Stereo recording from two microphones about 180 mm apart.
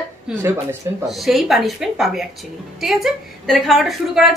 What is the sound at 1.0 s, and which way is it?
A woman's voice, centre (ahead or behind).